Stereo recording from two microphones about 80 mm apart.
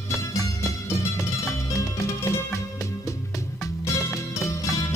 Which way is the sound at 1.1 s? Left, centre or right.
Left.